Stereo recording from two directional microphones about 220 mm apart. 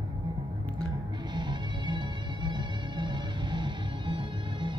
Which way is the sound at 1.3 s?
20° right (ahead or behind).